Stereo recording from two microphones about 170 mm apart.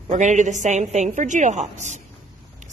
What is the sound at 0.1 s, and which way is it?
A woman's voice, 45° right (ahead or behind).